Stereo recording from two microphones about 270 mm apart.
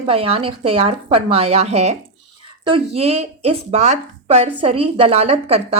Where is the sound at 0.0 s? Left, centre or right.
Right.